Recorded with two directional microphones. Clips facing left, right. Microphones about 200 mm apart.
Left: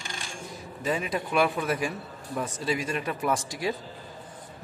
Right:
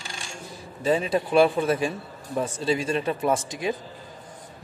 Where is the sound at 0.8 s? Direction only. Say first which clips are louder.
Right 6 dB; 30° right (ahead or behind).